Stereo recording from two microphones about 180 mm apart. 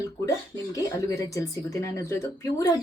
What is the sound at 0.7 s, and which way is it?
Speech, 20° left (ahead or behind).